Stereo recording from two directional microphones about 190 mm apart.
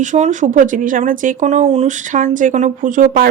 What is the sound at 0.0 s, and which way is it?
A woman's voice, 40° right (ahead or behind).